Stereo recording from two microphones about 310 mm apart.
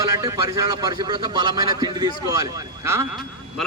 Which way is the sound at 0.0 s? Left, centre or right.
Centre.